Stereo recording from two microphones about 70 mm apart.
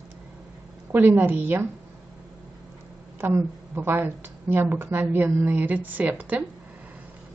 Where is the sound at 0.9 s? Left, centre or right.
Right.